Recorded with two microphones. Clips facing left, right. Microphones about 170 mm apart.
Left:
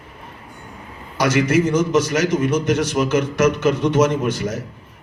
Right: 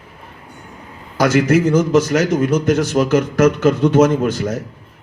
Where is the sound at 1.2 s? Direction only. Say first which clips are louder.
Right 3 dB; 50° right (ahead or behind).